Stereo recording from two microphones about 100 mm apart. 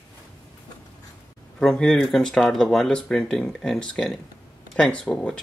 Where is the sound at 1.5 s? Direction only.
5° left (ahead or behind).